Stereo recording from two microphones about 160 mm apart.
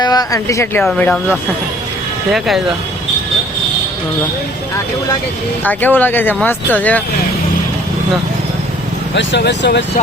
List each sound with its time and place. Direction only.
0.0 s speech: 25° left (ahead or behind); by 1.2 s 5° left (ahead or behind)
5.6 s speech: 10° left (ahead or behind)
9.1 s speech: 90° left